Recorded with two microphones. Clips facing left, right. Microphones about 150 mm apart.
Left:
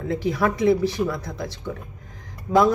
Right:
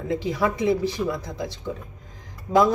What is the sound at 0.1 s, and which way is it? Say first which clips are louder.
A man's voice: left 1 dB; 20° right (ahead or behind).